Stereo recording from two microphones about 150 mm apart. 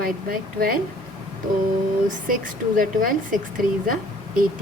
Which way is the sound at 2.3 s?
65° right (ahead or behind).